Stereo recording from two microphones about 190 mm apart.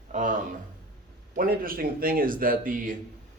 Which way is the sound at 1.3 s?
50° right (ahead or behind).